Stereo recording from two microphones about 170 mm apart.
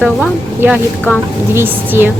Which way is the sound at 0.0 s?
10° right (ahead or behind).